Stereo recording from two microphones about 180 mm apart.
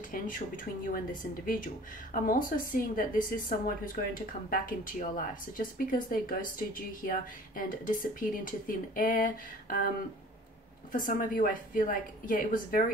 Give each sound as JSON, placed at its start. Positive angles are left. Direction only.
{"t": 0.1, "sound": "speech", "side_deg": 50}
{"t": 10.9, "sound": "speech", "side_deg": 45}